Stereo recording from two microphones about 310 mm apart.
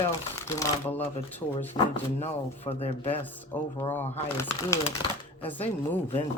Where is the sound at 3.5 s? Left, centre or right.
Centre.